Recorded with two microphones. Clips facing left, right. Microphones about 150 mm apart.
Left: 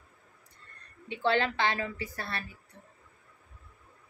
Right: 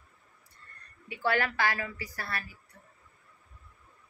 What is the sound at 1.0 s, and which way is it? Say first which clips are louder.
A woman's voice: left 2 dB; 25° left (ahead or behind).